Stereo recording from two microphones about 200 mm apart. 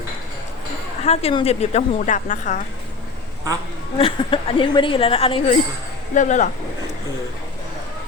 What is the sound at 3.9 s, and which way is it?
A woman's voice, 25° left (ahead or behind).